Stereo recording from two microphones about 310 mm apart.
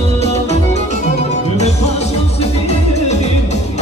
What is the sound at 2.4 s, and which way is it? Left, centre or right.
Music, left.